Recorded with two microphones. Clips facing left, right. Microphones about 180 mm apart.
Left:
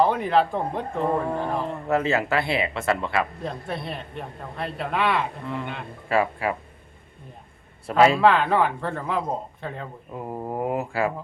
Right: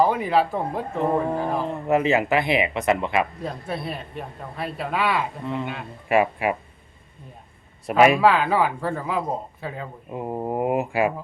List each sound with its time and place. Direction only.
0.0 s a man's voice: 5° right (ahead or behind)
0.9 s speech: 15° right (ahead or behind)
1.6 s speech: 15° right (ahead or behind)
3.4 s a man's voice: 5° right (ahead or behind)
6.1 s speech: 15° right (ahead or behind)
7.9 s a man's voice: 15° right (ahead or behind)
10.1 s speech: 20° right (ahead or behind)